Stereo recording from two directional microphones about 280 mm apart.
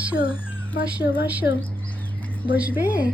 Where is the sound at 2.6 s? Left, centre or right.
Centre.